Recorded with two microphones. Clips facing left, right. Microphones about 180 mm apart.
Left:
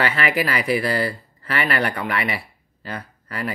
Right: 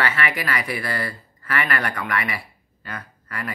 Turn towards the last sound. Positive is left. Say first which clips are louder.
# left 3 dB
turn(degrees=30)  # may be behind; listen again after turning